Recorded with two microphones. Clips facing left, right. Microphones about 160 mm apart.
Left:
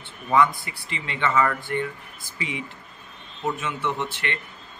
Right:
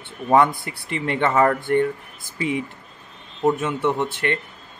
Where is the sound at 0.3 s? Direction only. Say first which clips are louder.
Right 4 dB; 50° right (ahead or behind).